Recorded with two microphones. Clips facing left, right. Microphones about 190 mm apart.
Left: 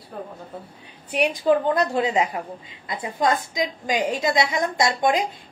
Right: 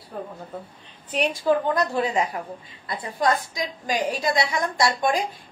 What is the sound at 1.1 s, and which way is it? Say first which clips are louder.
A woman's voice: left 2 dB; 15° left (ahead or behind).